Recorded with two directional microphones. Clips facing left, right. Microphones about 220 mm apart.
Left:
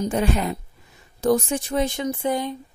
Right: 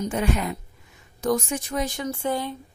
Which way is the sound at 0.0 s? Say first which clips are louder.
Left 3 dB; 35° left (ahead or behind).